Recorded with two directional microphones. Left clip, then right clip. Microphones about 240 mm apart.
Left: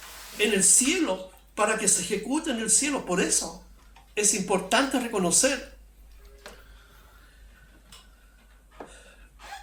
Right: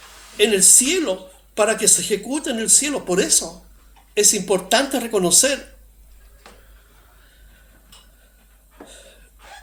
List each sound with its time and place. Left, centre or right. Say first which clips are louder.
0.3 s speech: right 7 dB; right